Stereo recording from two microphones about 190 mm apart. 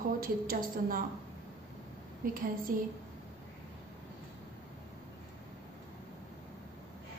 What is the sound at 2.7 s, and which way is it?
Speech, 45° right (ahead or behind).